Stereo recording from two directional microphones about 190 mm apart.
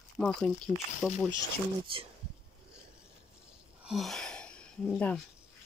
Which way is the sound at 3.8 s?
Centre (ahead or behind).